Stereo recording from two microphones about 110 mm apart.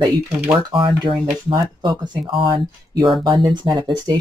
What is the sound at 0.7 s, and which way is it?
Speech, 50° right (ahead or behind).